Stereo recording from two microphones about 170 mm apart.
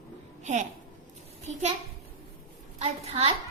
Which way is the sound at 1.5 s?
45° right (ahead or behind).